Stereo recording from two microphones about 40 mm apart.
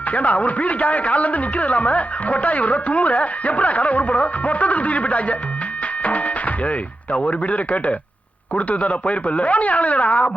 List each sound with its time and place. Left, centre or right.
0.1 s a man's voice: left
6.0 s music: left
7.3 s a man's voice: left